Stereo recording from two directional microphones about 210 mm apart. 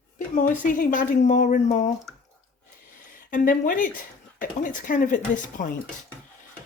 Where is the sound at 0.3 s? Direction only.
40° left (ahead or behind).